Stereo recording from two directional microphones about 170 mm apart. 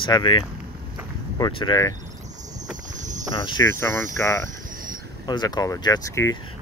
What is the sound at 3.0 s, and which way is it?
Cricket, 45° right (ahead or behind).